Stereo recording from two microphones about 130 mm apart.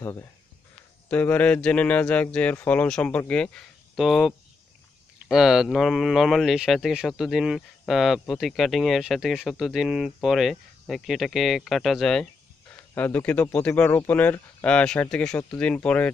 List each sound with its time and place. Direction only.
0.0 s speech: 25° left (ahead or behind)
1.1 s speech: 10° left (ahead or behind)
12.9 s speech: 15° left (ahead or behind)